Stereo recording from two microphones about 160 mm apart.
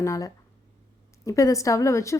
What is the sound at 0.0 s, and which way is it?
A woman's voice, 20° left (ahead or behind).